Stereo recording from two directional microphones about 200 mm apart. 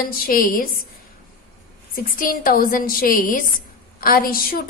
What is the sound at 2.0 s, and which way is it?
A woman's voice, 45° left (ahead or behind).